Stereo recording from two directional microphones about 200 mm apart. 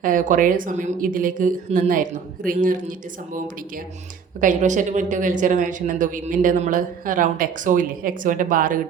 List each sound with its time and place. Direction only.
0.0 s speech: 40° right (ahead or behind)
4.4 s speech: 40° right (ahead or behind)